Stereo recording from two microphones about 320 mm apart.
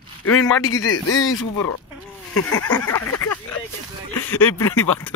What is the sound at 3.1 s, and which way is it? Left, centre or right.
Speech, left.